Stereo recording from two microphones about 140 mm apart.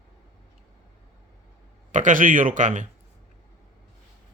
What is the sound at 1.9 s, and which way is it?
Speech, 65° right (ahead or behind).